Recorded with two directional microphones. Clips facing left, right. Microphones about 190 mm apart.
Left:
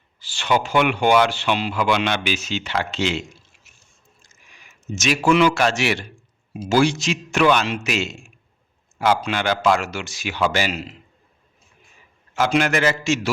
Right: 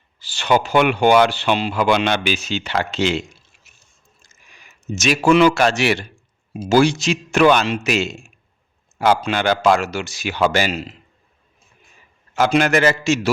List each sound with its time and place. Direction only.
0.2 s a man's voice: 40° right (ahead or behind)
4.9 s a man's voice: 35° right (ahead or behind)
12.4 s a man's voice: 40° right (ahead or behind)